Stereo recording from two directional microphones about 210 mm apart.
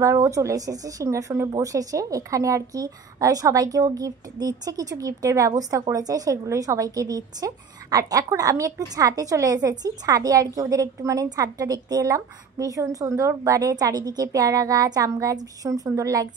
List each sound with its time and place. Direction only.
0.0 s speech: 15° right (ahead or behind)